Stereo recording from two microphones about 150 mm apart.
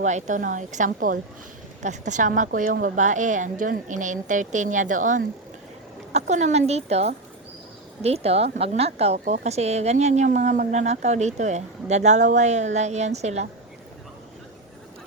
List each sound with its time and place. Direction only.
0.0 s speech: 55° right (ahead or behind)
1.8 s a woman's voice: 55° right (ahead or behind)